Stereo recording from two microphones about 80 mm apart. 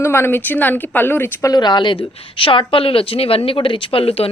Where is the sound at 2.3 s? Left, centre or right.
Left.